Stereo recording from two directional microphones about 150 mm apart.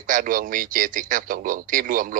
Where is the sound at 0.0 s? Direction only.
65° right (ahead or behind).